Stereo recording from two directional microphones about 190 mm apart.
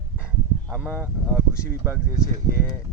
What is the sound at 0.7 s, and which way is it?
Speech, 5° right (ahead or behind).